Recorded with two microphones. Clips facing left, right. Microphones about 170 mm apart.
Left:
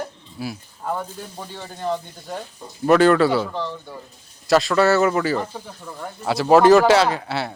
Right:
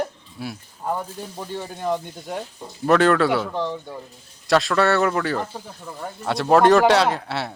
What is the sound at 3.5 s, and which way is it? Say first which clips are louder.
Speech: right 2 dB; 15° right (ahead or behind).